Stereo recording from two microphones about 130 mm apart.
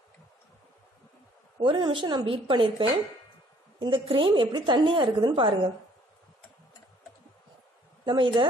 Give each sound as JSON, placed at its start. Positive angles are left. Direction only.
{"t": 1.6, "sound": "a woman's voice", "side_deg": -40}
{"t": 8.0, "sound": "a woman's voice", "side_deg": -35}